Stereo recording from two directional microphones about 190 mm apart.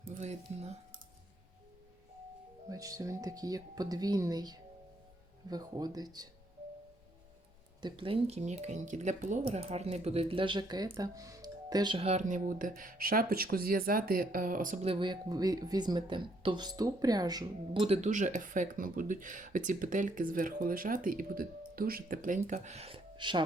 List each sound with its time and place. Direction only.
0.1 s speech: 35° right (ahead or behind)
2.6 s speech: 20° right (ahead or behind)
7.8 s speech: 25° right (ahead or behind); by 14.8 s 45° right (ahead or behind)
14.8 s speech: 25° right (ahead or behind)
17.8 s speech: 35° right (ahead or behind)